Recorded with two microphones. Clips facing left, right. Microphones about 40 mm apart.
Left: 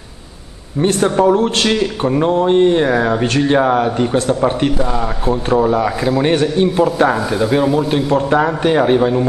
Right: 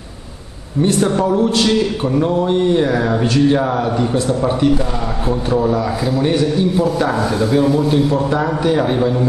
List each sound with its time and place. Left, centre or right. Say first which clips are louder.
1.2 s speech: left 2 dB; left
2.0 s speech: left 5 dB; left
5.6 s a man's voice: left 2 dB; left
6.2 s a man's voice: left 1 dB; left